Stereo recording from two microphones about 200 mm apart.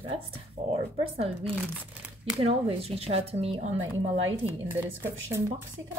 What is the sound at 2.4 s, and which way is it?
Speech, 30° right (ahead or behind).